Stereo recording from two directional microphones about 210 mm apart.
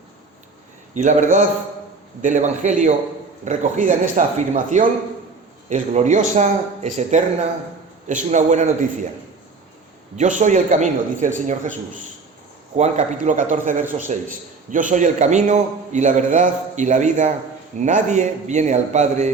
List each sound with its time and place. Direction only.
0.9 s a man's voice: 35° right (ahead or behind)
10.2 s a man's voice: 35° right (ahead or behind)
12.7 s a man's voice: 35° right (ahead or behind)